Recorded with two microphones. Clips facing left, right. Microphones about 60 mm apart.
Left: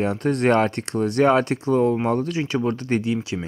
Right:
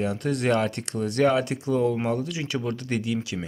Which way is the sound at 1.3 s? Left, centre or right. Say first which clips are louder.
Left 5 dB; left.